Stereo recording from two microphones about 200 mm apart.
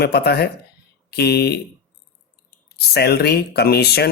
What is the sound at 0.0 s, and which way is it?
Speech, 55° left (ahead or behind).